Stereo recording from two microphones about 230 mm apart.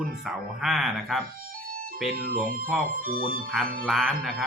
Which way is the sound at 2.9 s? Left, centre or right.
Right.